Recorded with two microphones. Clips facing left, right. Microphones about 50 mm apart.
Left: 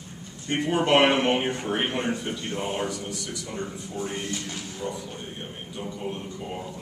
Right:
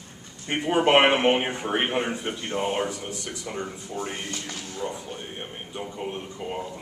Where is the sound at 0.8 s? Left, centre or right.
Right.